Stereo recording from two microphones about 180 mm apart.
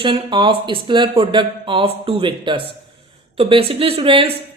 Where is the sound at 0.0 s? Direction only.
30° right (ahead or behind).